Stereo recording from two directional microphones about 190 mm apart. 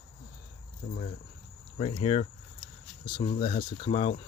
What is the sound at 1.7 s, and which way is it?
Speech, 30° left (ahead or behind).